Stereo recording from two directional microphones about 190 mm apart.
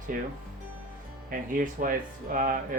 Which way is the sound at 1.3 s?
45° right (ahead or behind).